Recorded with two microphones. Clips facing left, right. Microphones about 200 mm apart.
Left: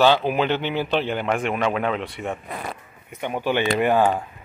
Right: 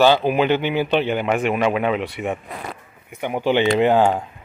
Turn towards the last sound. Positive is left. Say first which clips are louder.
# right 3 dB
turn(degrees=-20)  # may be behind; listen again after turning